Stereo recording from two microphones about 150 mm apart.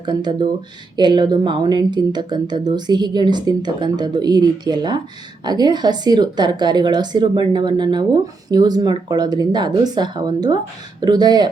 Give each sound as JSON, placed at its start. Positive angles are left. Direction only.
{"t": 0.0, "sound": "speech", "side_deg": -30}